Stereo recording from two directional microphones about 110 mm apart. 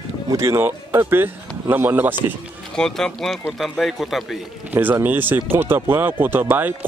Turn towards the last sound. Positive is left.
turn(degrees=-15)  # may be behind; listen again after turning